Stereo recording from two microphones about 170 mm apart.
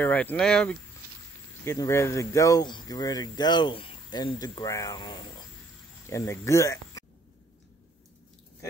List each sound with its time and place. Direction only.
0.0 s speech: 10° left (ahead or behind)
1.6 s speech: 15° left (ahead or behind)